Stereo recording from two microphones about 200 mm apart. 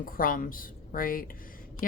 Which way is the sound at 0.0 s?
45° left (ahead or behind).